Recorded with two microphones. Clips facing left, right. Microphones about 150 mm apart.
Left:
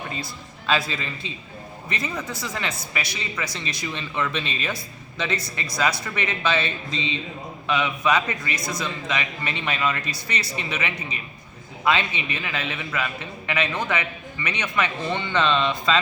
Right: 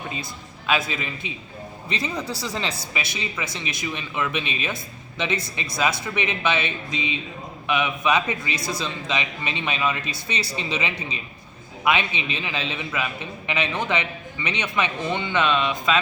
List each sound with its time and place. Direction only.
0.7 s a man's voice: 15° right (ahead or behind)
2.2 s a woman's voice: 35° right (ahead or behind)
2.9 s a man's voice: 20° right (ahead or behind)